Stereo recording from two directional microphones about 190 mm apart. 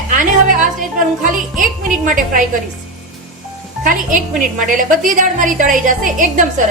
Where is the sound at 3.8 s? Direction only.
45° right (ahead or behind).